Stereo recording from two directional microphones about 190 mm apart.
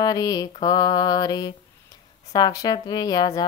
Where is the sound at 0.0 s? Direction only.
20° left (ahead or behind).